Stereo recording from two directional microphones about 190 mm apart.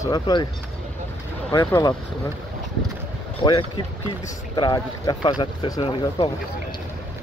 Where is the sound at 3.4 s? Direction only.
25° left (ahead or behind).